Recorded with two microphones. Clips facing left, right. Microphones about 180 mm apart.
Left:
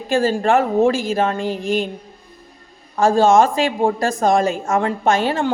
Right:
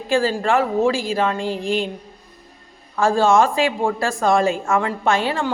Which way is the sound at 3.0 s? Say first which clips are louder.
Left 3 dB; 20° left (ahead or behind).